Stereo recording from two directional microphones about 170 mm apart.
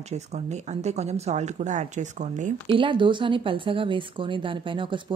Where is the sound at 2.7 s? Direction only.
30° right (ahead or behind).